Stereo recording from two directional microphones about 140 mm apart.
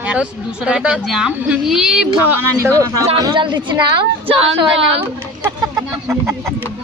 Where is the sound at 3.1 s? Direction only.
30° right (ahead or behind).